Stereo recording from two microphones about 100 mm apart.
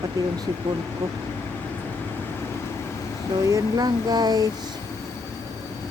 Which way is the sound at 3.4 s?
35° right (ahead or behind).